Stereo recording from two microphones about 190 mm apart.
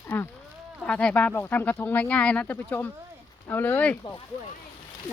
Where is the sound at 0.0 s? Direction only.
10° left (ahead or behind).